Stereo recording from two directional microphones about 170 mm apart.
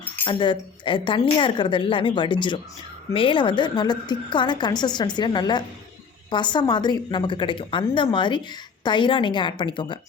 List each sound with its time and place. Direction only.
0.3 s a woman's voice: 30° left (ahead or behind)